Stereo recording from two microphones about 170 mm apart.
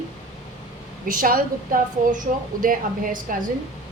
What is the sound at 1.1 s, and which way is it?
A woman's voice, 55° right (ahead or behind).